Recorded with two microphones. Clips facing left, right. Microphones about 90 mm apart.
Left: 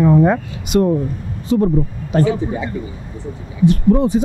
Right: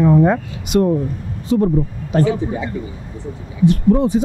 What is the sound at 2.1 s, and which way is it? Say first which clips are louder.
Speech: even; 30° left (ahead or behind).